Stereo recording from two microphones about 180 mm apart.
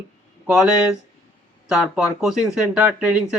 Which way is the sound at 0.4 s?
5° right (ahead or behind).